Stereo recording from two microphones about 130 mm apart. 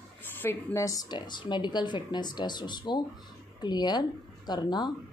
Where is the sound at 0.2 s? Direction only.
15° left (ahead or behind).